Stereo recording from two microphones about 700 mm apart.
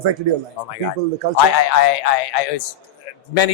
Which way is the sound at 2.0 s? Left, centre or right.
Left.